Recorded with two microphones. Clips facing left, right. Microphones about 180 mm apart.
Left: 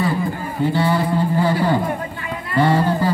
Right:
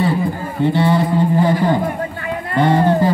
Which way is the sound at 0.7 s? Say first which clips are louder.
Right 3 dB; 25° right (ahead or behind).